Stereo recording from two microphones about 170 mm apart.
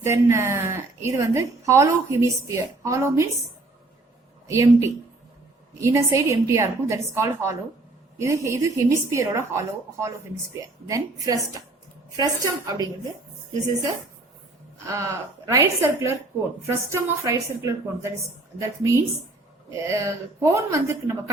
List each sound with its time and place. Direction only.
0.0 s a woman's voice: 15° right (ahead or behind)
4.4 s a woman's voice: 15° right (ahead or behind)
14.8 s a woman's voice: 20° right (ahead or behind)